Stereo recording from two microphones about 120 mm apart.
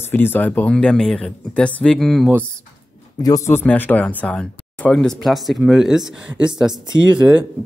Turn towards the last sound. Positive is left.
turn(degrees=-10)  # may be behind; listen again after turning